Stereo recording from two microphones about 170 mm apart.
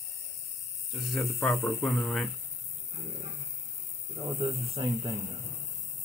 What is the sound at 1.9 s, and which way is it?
Speech, centre (ahead or behind).